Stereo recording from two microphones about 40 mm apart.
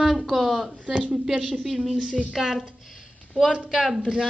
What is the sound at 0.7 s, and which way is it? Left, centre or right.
Child singing, right.